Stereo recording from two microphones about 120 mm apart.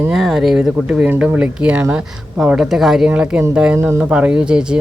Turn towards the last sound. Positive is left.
turn(degrees=-5)  # may be behind; listen again after turning